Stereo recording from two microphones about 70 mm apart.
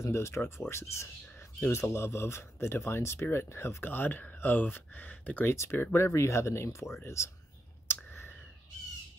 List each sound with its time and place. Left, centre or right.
0.0 s speech: left
7.9 s clicking: left